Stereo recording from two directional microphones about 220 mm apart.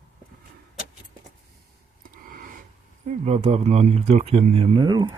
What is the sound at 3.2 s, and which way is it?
Speech, 25° right (ahead or behind).